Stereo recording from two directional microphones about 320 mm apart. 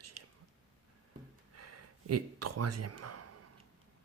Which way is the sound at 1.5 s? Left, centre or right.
Right.